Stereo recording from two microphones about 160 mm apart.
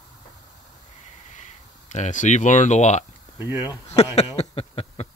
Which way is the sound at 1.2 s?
50° left (ahead or behind).